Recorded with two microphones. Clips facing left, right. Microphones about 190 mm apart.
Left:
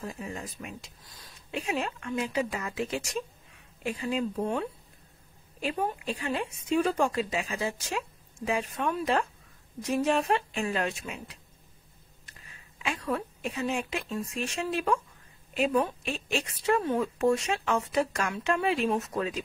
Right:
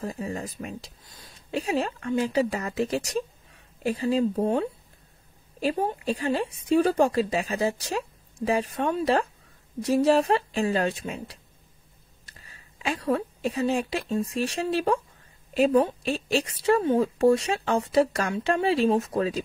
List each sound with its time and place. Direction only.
0.0 s a woman's voice: 35° right (ahead or behind)